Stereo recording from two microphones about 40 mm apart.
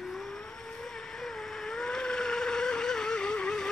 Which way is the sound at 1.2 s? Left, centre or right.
Centre.